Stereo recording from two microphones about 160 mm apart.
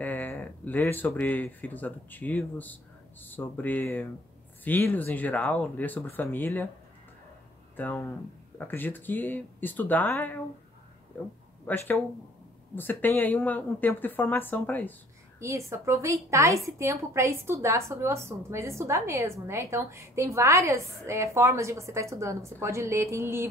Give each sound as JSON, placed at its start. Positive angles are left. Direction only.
{"t": 0.0, "sound": "speech", "side_deg": 10}
{"t": 7.7, "sound": "speech", "side_deg": 10}
{"t": 15.4, "sound": "a woman's voice", "side_deg": -20}